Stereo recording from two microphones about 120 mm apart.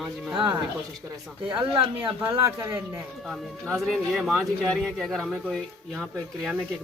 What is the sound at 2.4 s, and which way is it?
Speech, 25° right (ahead or behind).